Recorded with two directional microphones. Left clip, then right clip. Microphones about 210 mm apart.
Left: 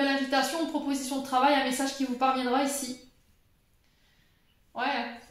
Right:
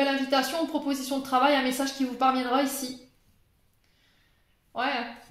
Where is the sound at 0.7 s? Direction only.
45° right (ahead or behind).